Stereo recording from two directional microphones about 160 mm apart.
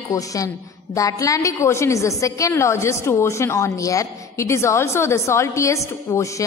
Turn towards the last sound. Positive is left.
turn(degrees=20)  # may be behind; listen again after turning